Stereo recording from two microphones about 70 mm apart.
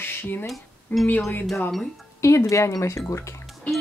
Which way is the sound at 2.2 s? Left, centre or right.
Left.